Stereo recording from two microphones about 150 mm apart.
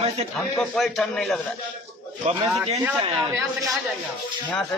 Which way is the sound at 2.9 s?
15° right (ahead or behind).